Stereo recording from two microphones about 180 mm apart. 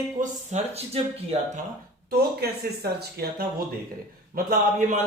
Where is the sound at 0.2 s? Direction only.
35° right (ahead or behind).